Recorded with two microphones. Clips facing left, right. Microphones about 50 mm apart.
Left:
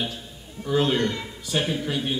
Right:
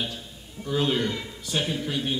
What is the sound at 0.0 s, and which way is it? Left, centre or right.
A man's voice, centre.